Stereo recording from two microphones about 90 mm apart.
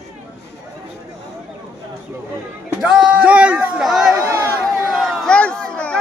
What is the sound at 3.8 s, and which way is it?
Speech, 5° right (ahead or behind).